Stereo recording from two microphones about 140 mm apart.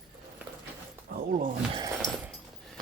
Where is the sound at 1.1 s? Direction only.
90° right.